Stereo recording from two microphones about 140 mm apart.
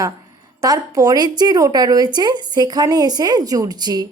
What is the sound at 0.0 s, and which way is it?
A woman's voice, 25° right (ahead or behind).